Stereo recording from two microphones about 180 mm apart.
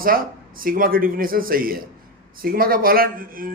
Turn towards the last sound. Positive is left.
turn(degrees=-50)  # may be behind; listen again after turning